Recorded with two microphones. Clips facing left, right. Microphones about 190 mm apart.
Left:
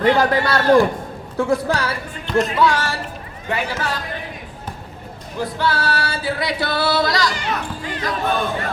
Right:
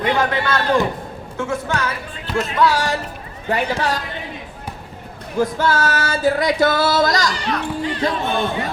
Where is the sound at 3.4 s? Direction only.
35° right (ahead or behind).